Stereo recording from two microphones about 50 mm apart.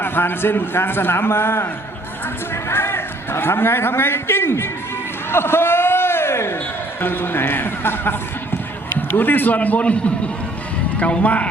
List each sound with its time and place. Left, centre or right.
0.0 s a man's voice: left
5.3 s a sound: left
7.0 s a man's voice: left